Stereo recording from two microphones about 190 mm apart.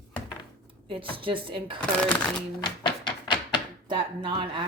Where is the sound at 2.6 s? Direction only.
25° left (ahead or behind).